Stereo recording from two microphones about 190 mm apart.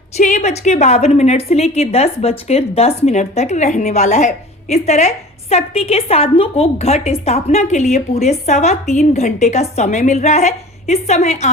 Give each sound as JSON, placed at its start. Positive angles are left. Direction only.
{"t": 0.2, "sound": "a woman's voice", "side_deg": 40}